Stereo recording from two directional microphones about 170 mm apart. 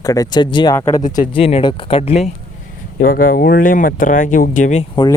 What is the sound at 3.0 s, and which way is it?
Speech, 60° left (ahead or behind).